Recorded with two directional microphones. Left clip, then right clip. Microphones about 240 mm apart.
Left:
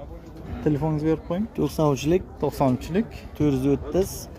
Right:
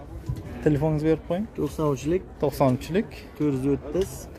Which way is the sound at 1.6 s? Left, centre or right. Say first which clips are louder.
Left 5 dB; left.